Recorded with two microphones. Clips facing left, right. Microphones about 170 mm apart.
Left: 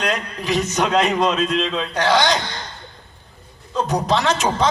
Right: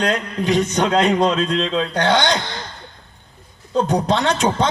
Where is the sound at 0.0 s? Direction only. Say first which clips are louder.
Right 4 dB; 35° right (ahead or behind).